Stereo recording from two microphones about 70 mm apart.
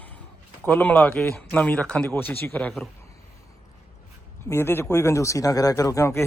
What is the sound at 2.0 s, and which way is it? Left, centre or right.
Speech, left.